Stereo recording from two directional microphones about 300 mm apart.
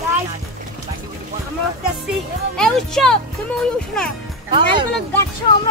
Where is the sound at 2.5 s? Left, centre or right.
Centre.